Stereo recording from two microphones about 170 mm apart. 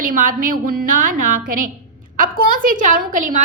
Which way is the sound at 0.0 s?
55° right (ahead or behind).